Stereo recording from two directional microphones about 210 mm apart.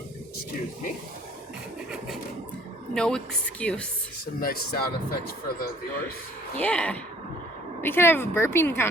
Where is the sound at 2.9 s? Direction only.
5° left (ahead or behind).